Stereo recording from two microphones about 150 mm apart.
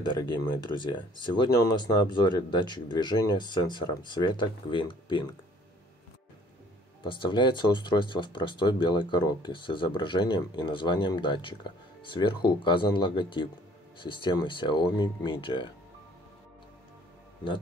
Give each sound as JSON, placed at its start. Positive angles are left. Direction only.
{"t": 0.0, "sound": "speech", "side_deg": 30}
{"t": 7.1, "sound": "speech", "side_deg": 30}